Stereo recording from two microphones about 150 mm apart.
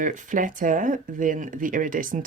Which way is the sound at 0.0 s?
60° right (ahead or behind).